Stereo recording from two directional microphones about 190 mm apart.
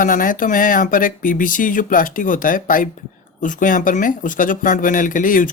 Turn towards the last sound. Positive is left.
turn(degrees=45)  # may be behind; listen again after turning